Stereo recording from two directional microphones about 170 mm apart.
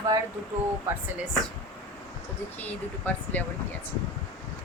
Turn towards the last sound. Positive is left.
turn(degrees=10)  # may be behind; listen again after turning